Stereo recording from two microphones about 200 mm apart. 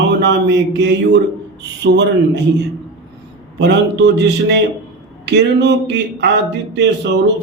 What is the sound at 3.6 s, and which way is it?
Speech, 60° right (ahead or behind).